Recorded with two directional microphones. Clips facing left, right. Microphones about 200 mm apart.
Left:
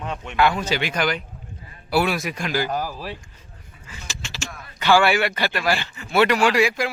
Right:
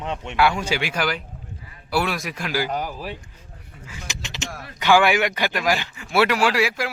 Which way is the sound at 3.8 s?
15° right (ahead or behind).